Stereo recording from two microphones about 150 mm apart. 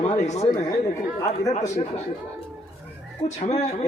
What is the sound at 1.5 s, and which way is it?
A man's voice, 45° left (ahead or behind).